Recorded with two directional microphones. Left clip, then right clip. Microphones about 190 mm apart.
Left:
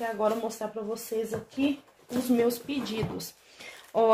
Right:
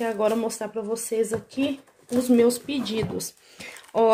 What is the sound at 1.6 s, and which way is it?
Speech, 55° right (ahead or behind).